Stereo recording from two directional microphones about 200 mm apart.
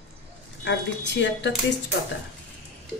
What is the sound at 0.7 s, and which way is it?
Speech, 60° left (ahead or behind).